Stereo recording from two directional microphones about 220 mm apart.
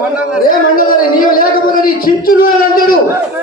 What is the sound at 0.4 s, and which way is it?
Speech, 40° left (ahead or behind).